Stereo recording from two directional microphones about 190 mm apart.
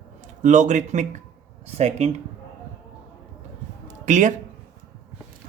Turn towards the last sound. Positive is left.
turn(degrees=-40)  # may be behind; listen again after turning